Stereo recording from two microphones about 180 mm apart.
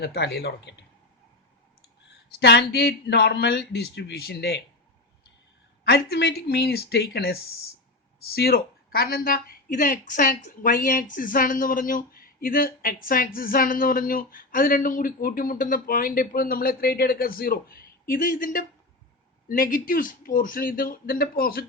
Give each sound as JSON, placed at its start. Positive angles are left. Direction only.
{"t": 0.0, "sound": "speech", "side_deg": 65}
{"t": 2.0, "sound": "speech", "side_deg": 70}
{"t": 5.8, "sound": "speech", "side_deg": 65}